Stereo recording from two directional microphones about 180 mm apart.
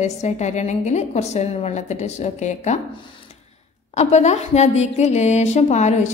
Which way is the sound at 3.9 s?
40° left (ahead or behind).